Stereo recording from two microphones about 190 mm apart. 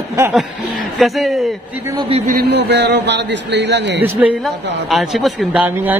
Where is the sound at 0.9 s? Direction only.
Centre (ahead or behind).